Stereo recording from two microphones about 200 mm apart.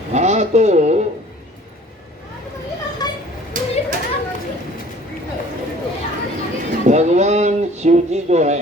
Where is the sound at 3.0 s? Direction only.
20° left (ahead or behind).